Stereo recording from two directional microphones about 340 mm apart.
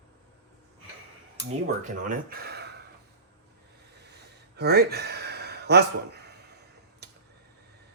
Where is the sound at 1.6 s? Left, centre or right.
Right.